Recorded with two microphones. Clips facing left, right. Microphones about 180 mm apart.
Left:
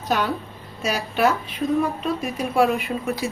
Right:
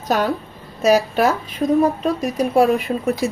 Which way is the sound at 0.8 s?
40° right (ahead or behind).